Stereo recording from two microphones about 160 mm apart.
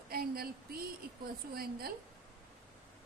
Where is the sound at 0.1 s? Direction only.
70° right (ahead or behind).